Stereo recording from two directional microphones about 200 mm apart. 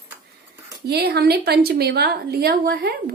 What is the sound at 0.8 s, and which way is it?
A woman's voice, 55° right (ahead or behind).